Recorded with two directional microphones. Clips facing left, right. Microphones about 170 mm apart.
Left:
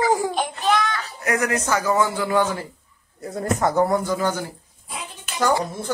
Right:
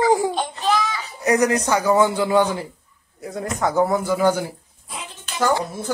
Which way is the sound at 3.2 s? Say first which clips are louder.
Left 2 dB; centre (ahead or behind).